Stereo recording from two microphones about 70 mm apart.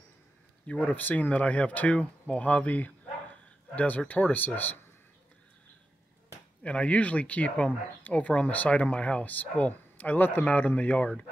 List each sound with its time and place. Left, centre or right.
0.7 s speech: left
6.6 s speech: centre